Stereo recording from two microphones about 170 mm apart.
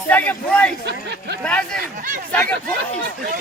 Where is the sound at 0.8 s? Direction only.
85° right.